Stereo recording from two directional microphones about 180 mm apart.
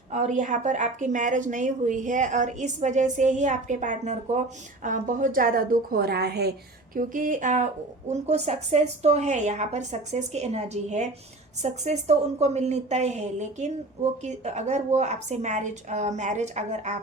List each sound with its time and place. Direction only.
0.1 s a woman's voice: 40° right (ahead or behind); by 6.5 s 65° right (ahead or behind)
6.9 s a woman's voice: 50° right (ahead or behind)